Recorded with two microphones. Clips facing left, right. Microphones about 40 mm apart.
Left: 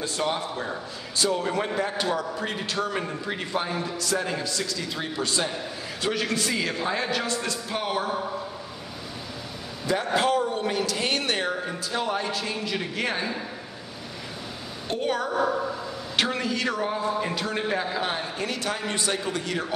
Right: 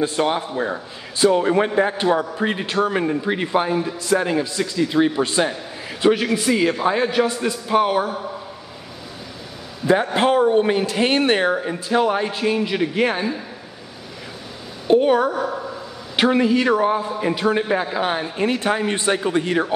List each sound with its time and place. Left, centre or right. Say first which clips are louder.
0.0 s speech: right 7 dB; right
3.7 s a man's voice: right 8 dB; centre
10.1 s speech: right 6 dB; right
14.9 s a woman's voice: right 11 dB; centre